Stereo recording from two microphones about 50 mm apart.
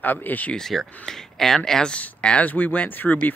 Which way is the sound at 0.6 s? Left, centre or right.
Centre.